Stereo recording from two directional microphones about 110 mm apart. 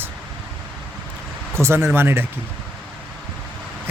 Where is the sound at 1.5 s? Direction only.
25° right (ahead or behind).